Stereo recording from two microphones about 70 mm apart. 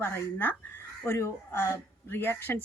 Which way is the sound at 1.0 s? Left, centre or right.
Left.